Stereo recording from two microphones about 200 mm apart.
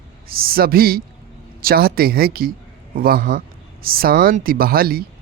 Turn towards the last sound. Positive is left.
turn(degrees=-50)  # may be behind; listen again after turning